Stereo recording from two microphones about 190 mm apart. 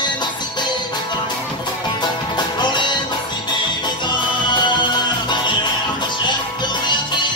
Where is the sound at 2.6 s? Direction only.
25° left (ahead or behind).